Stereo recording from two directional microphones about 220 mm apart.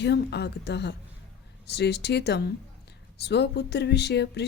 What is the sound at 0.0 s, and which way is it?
A woman's voice, 50° left (ahead or behind).